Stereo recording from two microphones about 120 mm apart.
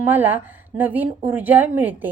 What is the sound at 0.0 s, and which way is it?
A woman's voice, 15° right (ahead or behind).